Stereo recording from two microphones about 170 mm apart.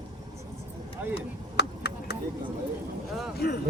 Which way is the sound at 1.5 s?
75° left (ahead or behind).